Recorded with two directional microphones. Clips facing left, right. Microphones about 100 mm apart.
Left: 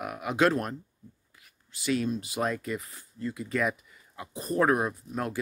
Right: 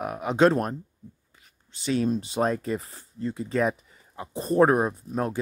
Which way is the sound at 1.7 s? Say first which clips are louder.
Right 3 dB; 30° right (ahead or behind).